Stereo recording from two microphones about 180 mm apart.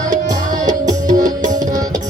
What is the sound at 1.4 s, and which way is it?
Tabla, 45° right (ahead or behind).